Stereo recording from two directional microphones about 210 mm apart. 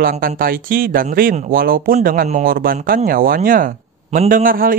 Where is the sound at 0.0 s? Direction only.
40° right (ahead or behind).